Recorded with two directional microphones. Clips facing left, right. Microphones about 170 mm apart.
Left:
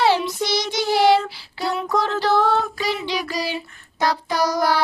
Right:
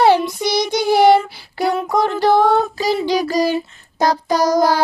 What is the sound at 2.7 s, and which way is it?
Child singing, 40° right (ahead or behind).